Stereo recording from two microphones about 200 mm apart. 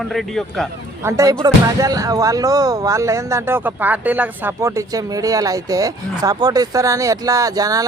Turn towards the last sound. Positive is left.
turn(degrees=-20)  # may be behind; listen again after turning